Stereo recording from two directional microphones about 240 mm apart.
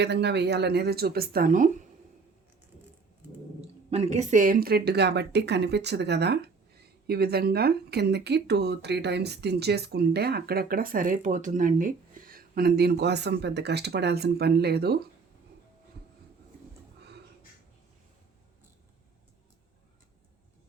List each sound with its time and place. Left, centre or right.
0.0 s speech: right
3.8 s speech: right